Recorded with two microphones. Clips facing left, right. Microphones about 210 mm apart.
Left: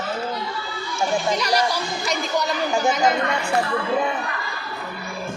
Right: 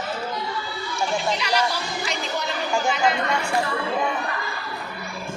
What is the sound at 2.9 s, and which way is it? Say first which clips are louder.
Speech: left 1 dB; 40° left (ahead or behind).